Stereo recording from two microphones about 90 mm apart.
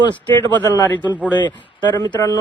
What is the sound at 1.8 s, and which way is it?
Speech, 55° left (ahead or behind).